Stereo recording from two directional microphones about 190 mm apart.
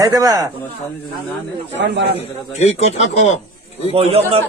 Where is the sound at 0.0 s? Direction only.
20° right (ahead or behind).